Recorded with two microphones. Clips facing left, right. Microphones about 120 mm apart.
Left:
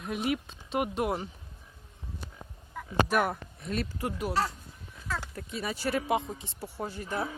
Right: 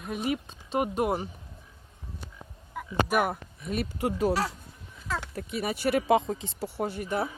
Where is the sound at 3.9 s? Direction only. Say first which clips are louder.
Right 6 dB; 25° right (ahead or behind).